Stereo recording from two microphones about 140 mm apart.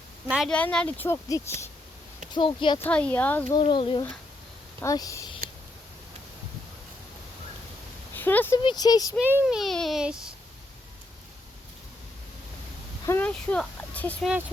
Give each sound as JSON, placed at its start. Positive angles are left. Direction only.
{"t": 0.4, "sound": "speech", "side_deg": 5}
{"t": 2.3, "sound": "speech", "side_deg": 35}
{"t": 2.8, "sound": "speech", "side_deg": 10}
{"t": 3.6, "sound": "speech", "side_deg": 35}
{"t": 4.8, "sound": "speech", "side_deg": 25}
{"t": 5.4, "sound": "a sound", "side_deg": -90}
{"t": 8.1, "sound": "a sound", "side_deg": 15}
{"t": 8.5, "sound": "speech", "side_deg": 30}
{"t": 9.2, "sound": "a child's voice", "side_deg": -10}
{"t": 13.1, "sound": "speech", "side_deg": 10}